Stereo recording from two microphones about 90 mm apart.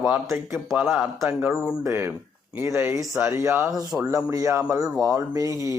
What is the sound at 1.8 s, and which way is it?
Speech, 25° right (ahead or behind).